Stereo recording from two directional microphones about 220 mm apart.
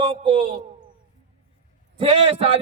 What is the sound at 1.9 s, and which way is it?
Speech, 25° right (ahead or behind).